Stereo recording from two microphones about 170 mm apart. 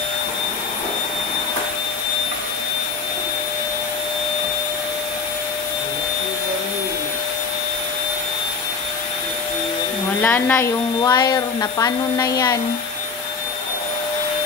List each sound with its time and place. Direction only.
10.2 s speech: 10° left (ahead or behind)